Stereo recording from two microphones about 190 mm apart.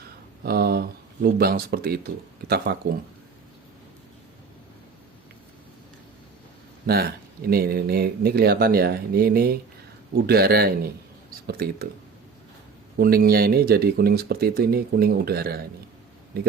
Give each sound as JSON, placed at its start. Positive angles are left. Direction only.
{"t": 0.4, "sound": "speech", "side_deg": -55}
{"t": 6.8, "sound": "speech", "side_deg": -55}
{"t": 13.0, "sound": "speech", "side_deg": -55}